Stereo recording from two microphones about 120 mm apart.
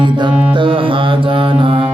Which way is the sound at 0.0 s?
45° right (ahead or behind).